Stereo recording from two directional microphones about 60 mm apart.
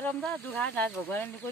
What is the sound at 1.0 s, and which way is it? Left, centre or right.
Speech, left.